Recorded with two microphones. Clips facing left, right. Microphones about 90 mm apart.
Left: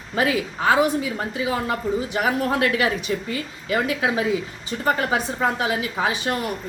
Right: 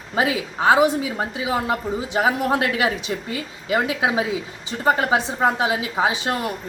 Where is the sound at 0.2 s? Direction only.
15° right (ahead or behind).